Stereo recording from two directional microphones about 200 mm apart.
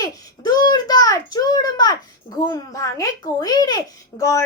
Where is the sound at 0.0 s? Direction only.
20° left (ahead or behind).